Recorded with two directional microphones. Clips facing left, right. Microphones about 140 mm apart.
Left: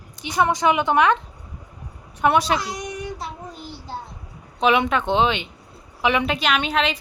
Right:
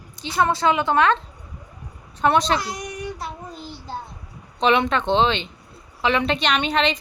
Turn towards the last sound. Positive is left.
turn(degrees=5)  # may be behind; listen again after turning